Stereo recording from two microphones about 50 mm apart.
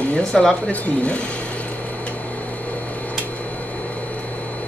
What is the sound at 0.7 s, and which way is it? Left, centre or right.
Speech, left.